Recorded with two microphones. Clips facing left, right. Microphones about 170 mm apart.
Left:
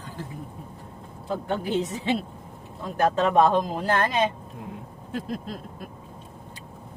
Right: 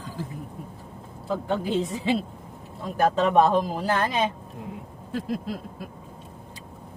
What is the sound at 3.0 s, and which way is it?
Speech, 5° right (ahead or behind).